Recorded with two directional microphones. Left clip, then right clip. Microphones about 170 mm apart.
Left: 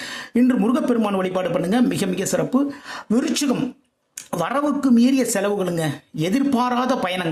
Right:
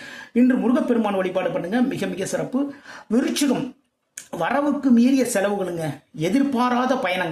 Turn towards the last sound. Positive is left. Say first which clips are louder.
# even
turn(degrees=20)  # may be behind; listen again after turning